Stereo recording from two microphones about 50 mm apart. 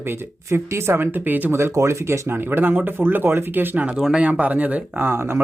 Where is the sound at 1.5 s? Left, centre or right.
Right.